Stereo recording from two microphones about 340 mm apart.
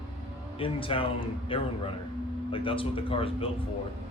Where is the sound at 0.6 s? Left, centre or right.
Centre.